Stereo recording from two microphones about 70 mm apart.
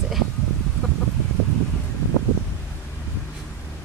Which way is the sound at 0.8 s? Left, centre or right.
Centre.